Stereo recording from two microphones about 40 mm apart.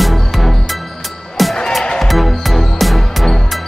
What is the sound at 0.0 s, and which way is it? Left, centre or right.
Music, centre.